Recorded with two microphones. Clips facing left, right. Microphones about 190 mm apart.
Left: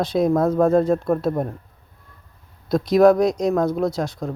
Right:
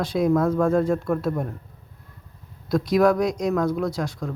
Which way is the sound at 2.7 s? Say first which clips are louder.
Left 4 dB; 25° left (ahead or behind).